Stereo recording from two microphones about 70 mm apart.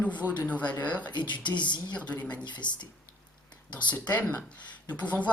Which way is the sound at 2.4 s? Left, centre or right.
Left.